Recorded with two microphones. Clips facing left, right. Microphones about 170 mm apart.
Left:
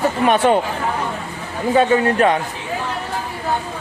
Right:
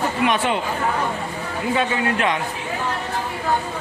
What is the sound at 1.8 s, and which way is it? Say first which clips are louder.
Speech: left 9 dB; 40° left (ahead or behind).